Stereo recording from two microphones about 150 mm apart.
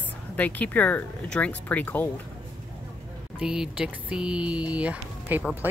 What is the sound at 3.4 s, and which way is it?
Speech, 5° right (ahead or behind).